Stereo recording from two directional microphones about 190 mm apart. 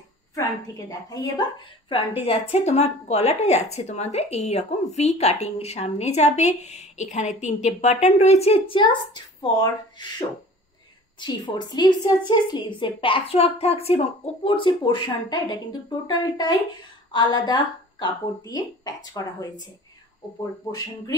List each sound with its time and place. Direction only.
0.3 s a woman's voice: 15° left (ahead or behind)
1.9 s a woman's voice: 30° left (ahead or behind)